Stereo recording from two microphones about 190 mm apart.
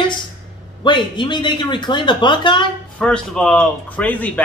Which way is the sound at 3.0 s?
5° left (ahead or behind).